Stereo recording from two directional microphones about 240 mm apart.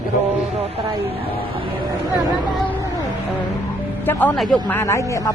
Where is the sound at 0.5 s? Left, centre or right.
Right.